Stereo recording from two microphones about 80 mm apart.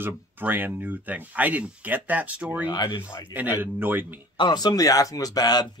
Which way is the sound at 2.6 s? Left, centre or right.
Left.